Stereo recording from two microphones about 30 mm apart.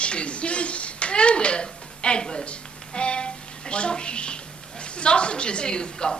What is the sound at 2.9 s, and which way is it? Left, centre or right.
Music, left.